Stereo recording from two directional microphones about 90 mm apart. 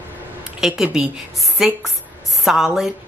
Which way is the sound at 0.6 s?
5° right (ahead or behind).